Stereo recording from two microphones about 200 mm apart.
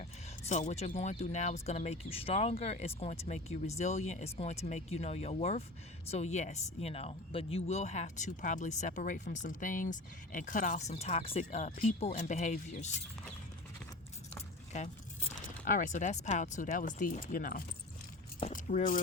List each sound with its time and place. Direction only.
0.0 s speech: 35° left (ahead or behind)
15.6 s speech: 40° left (ahead or behind)
18.3 s keys jangling: 35° left (ahead or behind)